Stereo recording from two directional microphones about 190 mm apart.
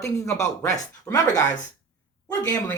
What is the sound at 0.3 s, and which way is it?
Speech, 15° left (ahead or behind).